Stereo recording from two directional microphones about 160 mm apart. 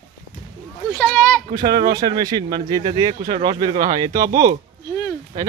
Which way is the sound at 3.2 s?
40° right (ahead or behind).